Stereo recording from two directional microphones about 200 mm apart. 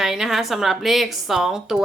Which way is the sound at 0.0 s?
Centre (ahead or behind).